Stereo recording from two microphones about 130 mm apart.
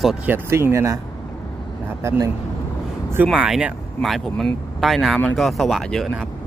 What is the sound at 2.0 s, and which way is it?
Speech, 20° right (ahead or behind).